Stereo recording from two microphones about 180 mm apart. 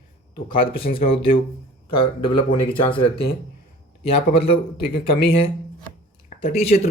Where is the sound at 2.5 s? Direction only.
30° left (ahead or behind).